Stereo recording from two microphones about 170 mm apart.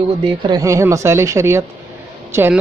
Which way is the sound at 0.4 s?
20° right (ahead or behind).